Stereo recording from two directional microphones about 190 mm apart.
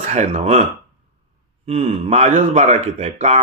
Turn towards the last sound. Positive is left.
turn(degrees=-35)  # may be behind; listen again after turning